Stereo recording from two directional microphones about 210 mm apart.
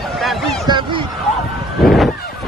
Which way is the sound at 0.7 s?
25° right (ahead or behind).